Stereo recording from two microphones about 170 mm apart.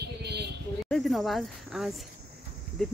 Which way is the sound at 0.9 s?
Centre (ahead or behind).